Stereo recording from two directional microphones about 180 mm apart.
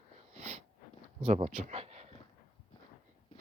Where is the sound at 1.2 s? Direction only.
35° right (ahead or behind).